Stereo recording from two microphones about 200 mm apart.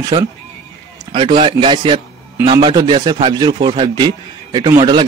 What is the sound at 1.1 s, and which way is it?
A man's voice, 25° right (ahead or behind).